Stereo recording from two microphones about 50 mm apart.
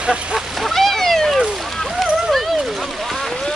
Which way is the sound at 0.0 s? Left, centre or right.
Centre.